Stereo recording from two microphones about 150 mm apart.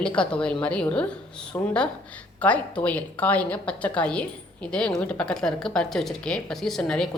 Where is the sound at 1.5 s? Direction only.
20° left (ahead or behind).